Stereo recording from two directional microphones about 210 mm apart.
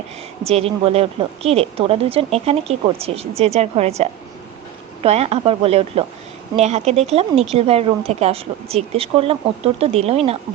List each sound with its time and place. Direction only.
0.4 s a woman's voice: 30° right (ahead or behind)